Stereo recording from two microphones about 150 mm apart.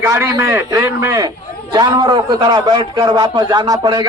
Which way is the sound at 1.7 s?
30° right (ahead or behind).